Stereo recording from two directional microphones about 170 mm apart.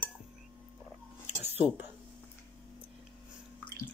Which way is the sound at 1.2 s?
10° right (ahead or behind).